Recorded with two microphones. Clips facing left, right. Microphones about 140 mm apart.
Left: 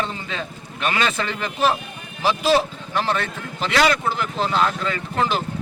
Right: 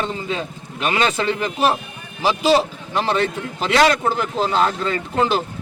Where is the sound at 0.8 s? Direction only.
20° right (ahead or behind).